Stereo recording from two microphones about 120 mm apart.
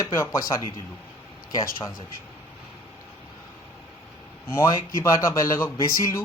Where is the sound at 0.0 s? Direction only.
25° left (ahead or behind).